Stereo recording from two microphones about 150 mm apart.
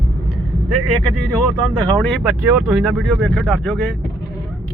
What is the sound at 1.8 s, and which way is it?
Speech, 5° left (ahead or behind).